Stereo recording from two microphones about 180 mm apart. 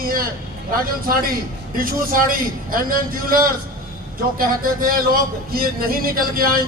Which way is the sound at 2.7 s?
50° right (ahead or behind).